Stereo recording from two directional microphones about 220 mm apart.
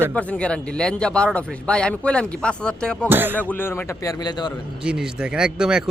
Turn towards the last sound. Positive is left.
turn(degrees=-5)  # may be behind; listen again after turning